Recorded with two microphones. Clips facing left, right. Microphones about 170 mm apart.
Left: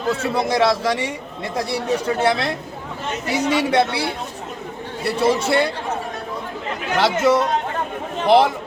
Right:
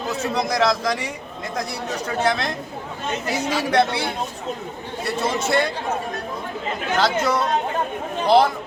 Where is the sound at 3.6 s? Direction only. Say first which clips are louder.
Left 1 dB; 30° left (ahead or behind).